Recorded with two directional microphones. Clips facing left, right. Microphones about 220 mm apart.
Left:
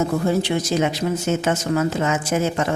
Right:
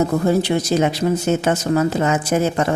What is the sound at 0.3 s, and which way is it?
A woman's voice, 40° right (ahead or behind).